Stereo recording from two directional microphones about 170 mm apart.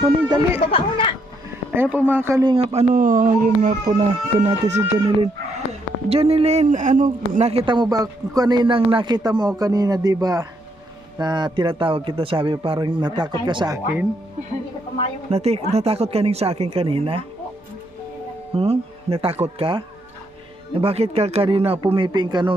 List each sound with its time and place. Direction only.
0.0 s speech: 20° right (ahead or behind)
0.6 s speech: 35° left (ahead or behind)
1.7 s speech: 10° right (ahead or behind)
2.6 s a man's voice: 45° right (ahead or behind)
6.1 s a man's voice: 35° right (ahead or behind)
13.8 s speech: 10° right (ahead or behind)
15.3 s a man's voice: 35° right (ahead or behind)
18.5 s a man's voice: 35° right (ahead or behind)